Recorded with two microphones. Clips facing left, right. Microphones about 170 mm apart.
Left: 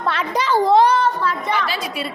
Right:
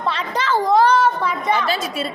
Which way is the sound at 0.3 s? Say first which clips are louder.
Left 2 dB; 15° left (ahead or behind).